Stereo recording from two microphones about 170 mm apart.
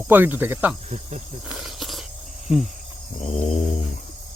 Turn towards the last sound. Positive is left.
turn(degrees=45)  # may be behind; listen again after turning